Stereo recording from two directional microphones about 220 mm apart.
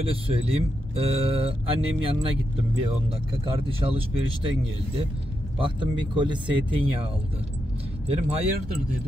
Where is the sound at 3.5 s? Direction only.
25° right (ahead or behind).